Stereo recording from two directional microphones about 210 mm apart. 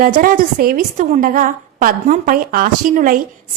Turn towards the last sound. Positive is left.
turn(degrees=-40)  # may be behind; listen again after turning